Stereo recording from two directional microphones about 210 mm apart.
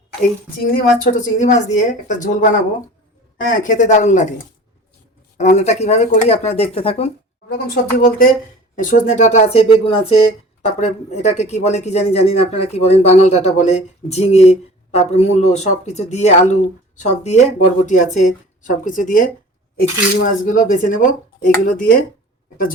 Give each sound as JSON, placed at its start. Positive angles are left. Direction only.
{"t": 0.6, "sound": "speech", "side_deg": 45}
{"t": 5.4, "sound": "speech", "side_deg": 35}
{"t": 7.7, "sound": "speech", "side_deg": 45}